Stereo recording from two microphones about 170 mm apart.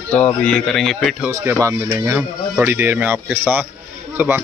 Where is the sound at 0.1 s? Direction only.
5° left (ahead or behind).